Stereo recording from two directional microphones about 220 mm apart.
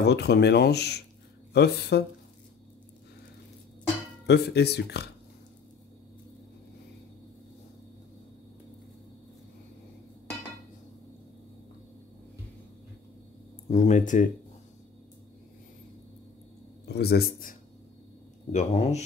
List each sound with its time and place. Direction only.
0.0 s speech: 50° left (ahead or behind)
4.3 s speech: 50° left (ahead or behind)
13.7 s speech: 35° left (ahead or behind)
16.8 s speech: 45° left (ahead or behind)
18.5 s speech: 30° left (ahead or behind)